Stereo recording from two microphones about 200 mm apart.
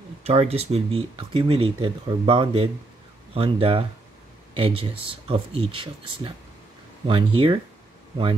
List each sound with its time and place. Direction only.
0.2 s speech: 30° right (ahead or behind)